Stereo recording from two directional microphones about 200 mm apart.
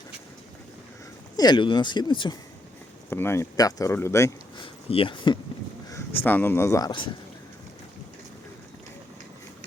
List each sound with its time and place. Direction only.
1.4 s speech: 20° left (ahead or behind)
3.1 s speech: 10° left (ahead or behind)
4.6 s a sound: 25° left (ahead or behind)
5.9 s speech: 10° left (ahead or behind)